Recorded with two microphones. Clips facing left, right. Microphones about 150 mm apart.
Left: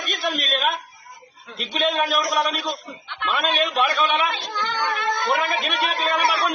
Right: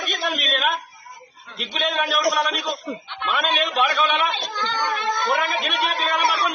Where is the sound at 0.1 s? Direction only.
Centre (ahead or behind).